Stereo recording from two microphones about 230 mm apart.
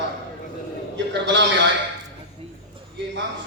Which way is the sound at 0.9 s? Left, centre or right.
Right.